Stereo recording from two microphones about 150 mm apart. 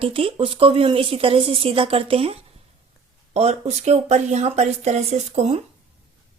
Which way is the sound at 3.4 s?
45° right (ahead or behind).